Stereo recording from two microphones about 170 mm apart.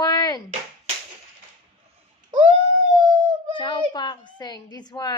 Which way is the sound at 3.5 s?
25° left (ahead or behind).